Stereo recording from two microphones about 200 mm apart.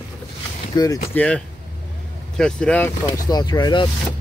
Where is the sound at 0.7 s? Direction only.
15° left (ahead or behind).